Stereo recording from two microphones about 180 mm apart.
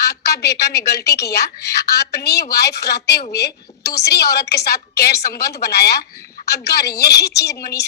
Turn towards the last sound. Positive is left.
turn(degrees=65)  # may be behind; listen again after turning